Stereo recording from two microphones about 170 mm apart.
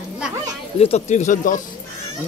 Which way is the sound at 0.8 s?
40° left (ahead or behind).